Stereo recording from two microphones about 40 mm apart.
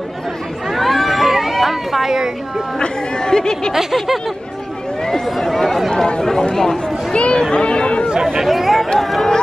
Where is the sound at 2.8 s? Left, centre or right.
Centre.